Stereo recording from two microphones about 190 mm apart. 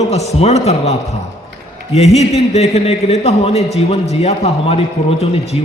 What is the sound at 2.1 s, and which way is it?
A man's voice, 35° left (ahead or behind).